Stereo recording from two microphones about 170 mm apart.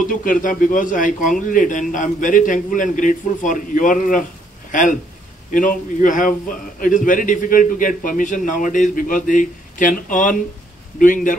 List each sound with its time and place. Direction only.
0.0 s a man's voice: 55° left (ahead or behind)